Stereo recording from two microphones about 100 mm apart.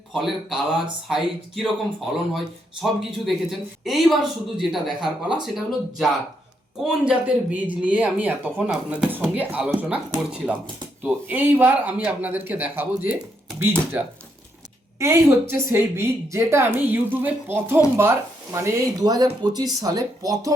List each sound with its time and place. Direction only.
0.1 s speech: centre (ahead or behind)
14.9 s a woman's voice: 30° right (ahead or behind)